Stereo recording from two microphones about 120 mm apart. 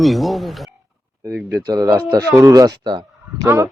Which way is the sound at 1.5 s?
30° right (ahead or behind).